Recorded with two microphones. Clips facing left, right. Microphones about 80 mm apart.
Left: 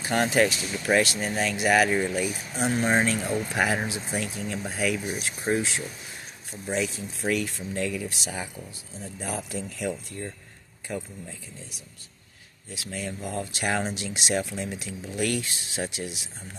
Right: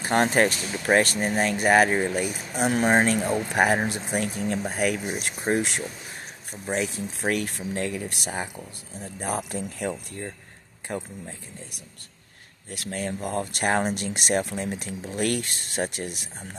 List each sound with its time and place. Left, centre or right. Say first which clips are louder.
0.0 s speech: right 2 dB; right
6.7 s speech: right 1 dB; right
12.6 s speech: right 4 dB; right